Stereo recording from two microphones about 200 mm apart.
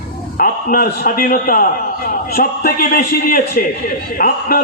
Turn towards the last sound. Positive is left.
turn(degrees=45)  # may be behind; listen again after turning